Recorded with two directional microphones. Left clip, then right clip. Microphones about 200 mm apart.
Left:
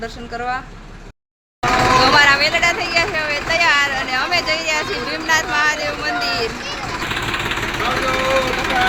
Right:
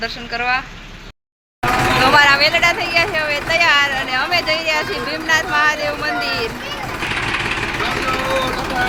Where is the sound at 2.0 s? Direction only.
10° right (ahead or behind).